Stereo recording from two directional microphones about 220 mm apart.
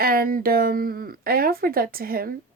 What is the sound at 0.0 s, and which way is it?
Speech, 40° right (ahead or behind).